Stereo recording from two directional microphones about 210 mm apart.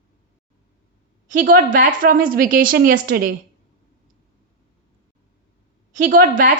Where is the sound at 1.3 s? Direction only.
40° right (ahead or behind).